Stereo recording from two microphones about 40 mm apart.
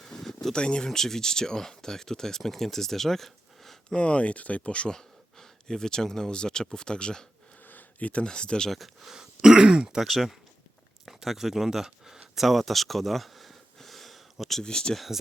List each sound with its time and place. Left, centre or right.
0.0 s a sound: centre
0.5 s speech: left
0.9 s speech: centre
3.9 s speech: left
4.9 s speech: centre
7.7 s a sound: left
8.2 s speech: left
8.7 s speech: centre
9.1 s throat clearing: centre
10.0 s speech: centre
12.4 s a sound: centre
14.6 s speech: centre
14.9 s speech: centre